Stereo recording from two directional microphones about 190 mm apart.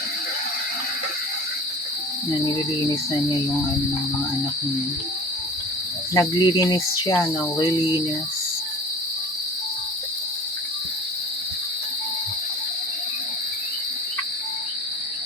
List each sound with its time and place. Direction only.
6.1 s speech: 20° left (ahead or behind)